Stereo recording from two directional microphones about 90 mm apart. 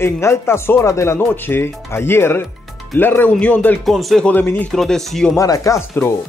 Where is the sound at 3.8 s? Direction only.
Centre (ahead or behind).